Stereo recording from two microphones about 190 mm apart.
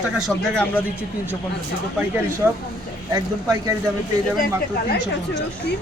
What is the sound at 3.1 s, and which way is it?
Speech, 15° right (ahead or behind).